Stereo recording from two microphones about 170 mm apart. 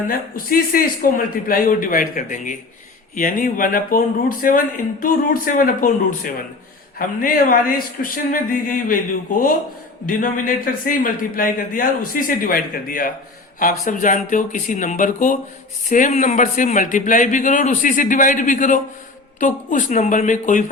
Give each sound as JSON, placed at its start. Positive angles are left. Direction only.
{"t": 0.1, "sound": "speech", "side_deg": 55}